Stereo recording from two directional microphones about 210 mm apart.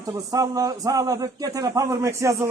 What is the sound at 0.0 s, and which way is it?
A man's voice, 15° right (ahead or behind).